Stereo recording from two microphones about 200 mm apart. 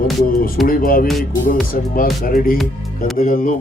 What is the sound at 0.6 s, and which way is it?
Speech, 45° left (ahead or behind).